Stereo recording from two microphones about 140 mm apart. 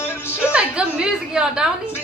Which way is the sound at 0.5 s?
5° right (ahead or behind).